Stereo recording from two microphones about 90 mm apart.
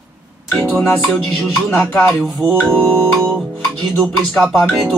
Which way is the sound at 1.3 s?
Centre (ahead or behind).